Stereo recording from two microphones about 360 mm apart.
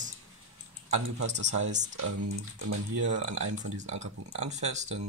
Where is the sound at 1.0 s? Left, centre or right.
Right.